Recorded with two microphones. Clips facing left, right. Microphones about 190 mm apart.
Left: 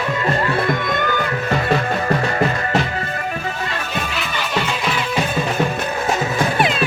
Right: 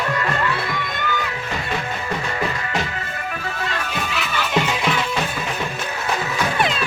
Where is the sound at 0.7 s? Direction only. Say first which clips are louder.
Left 7 dB; 50° left (ahead or behind).